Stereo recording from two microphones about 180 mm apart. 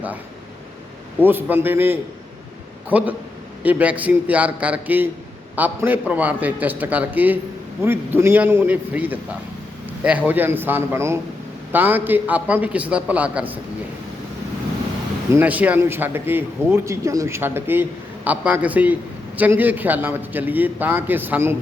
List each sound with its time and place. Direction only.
1.2 s a man's voice: 10° right (ahead or behind)
15.3 s a man's voice: 10° right (ahead or behind)